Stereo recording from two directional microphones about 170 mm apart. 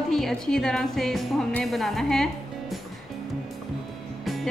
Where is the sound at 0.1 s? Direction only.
5° left (ahead or behind).